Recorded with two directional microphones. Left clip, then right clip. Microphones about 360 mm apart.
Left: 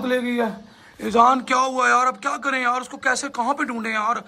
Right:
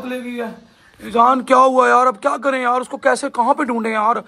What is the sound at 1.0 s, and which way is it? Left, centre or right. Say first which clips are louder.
Speech: right 2 dB; centre.